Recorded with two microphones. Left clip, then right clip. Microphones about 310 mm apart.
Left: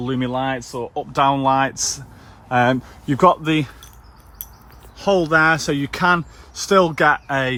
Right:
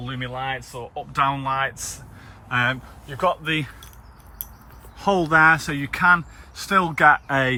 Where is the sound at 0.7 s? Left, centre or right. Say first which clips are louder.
Left 7 dB; left.